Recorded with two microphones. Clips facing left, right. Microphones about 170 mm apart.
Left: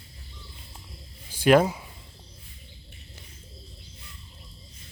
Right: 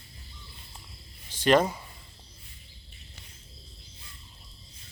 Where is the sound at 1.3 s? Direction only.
10° left (ahead or behind).